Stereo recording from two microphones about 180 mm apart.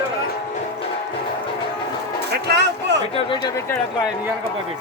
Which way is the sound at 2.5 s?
70° right (ahead or behind).